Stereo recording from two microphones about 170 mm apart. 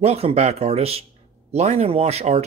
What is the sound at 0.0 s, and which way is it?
Speech, 35° right (ahead or behind).